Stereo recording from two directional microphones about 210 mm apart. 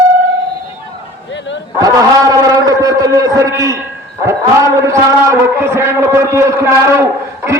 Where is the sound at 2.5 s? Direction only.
15° right (ahead or behind).